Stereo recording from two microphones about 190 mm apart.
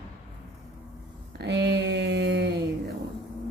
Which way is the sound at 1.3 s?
65° right (ahead or behind).